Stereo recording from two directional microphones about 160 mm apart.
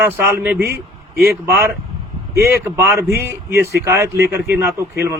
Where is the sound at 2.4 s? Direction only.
15° right (ahead or behind).